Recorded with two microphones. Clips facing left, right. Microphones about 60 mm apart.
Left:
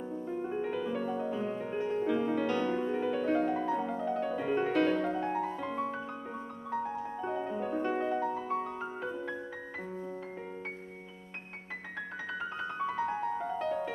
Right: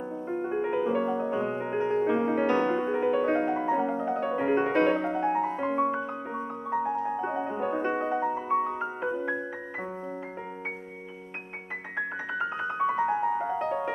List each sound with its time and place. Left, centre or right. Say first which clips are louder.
0.3 s music: right 6 dB; right
12.4 s piano: right 8 dB; right